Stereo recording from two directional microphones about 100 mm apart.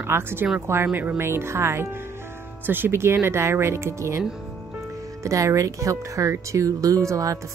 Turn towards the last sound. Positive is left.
turn(degrees=-35)  # may be behind; listen again after turning